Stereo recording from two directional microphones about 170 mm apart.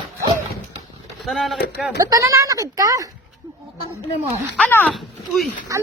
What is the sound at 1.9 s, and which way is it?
Speech, 20° right (ahead or behind).